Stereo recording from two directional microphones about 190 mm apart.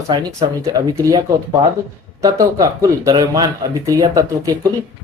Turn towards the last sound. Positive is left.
turn(degrees=-20)  # may be behind; listen again after turning